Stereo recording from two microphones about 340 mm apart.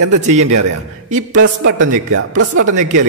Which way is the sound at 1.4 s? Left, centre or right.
Right.